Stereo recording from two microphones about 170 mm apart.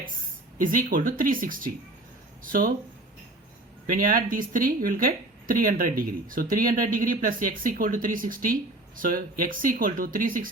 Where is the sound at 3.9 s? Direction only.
55° right (ahead or behind).